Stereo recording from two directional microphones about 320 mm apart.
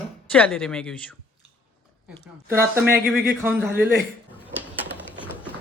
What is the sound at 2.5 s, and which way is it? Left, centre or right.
Speech, centre.